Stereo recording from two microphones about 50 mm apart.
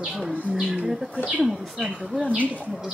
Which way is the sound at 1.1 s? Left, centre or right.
Right.